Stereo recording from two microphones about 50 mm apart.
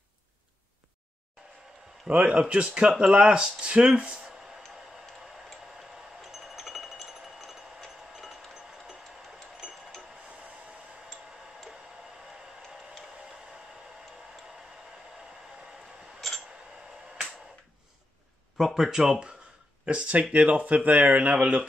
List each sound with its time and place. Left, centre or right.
2.0 s speech: right
4.3 s music: centre
5.8 s wind chime: centre
6.6 s music: centre
7.1 s a sound: centre
12.6 s a sound: centre
18.6 s speech: centre; by 21.6 s right